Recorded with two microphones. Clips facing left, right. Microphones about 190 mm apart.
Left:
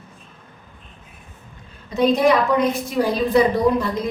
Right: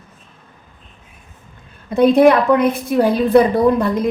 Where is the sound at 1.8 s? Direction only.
55° right (ahead or behind).